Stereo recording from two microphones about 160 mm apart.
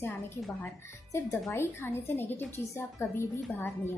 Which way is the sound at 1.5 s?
15° left (ahead or behind).